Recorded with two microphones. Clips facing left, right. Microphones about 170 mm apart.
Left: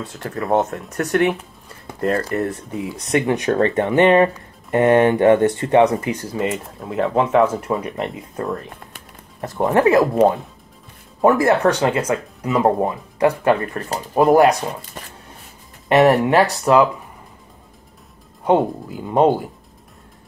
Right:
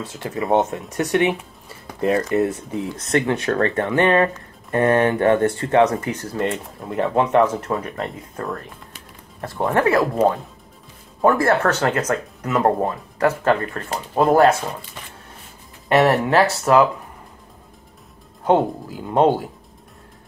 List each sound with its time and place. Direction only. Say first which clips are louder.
0.0 s speech: even; 5° right (ahead or behind)
3.0 s speech: left 2 dB; 15° left (ahead or behind)
11.1 s speech: left 2 dB; 20° left (ahead or behind)
15.0 s a sound: left 3 dB; 40° left (ahead or behind)
15.9 s speech: left 3 dB; 20° left (ahead or behind)
18.4 s speech: left 1 dB; centre (ahead or behind)